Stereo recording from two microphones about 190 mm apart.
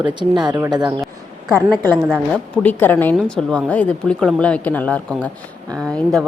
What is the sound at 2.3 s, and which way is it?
A woman's voice, 10° left (ahead or behind).